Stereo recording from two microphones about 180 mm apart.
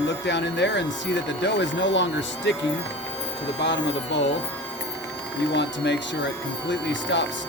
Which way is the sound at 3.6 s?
75° left (ahead or behind).